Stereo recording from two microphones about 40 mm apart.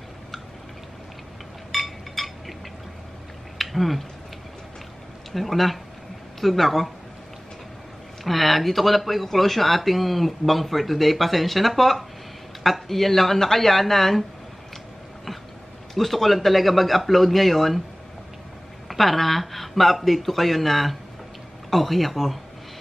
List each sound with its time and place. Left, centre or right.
1.7 s chink: centre
3.5 s a sound: centre
5.3 s speech: centre
8.2 s speech: centre
15.9 s speech: centre
18.9 s speech: centre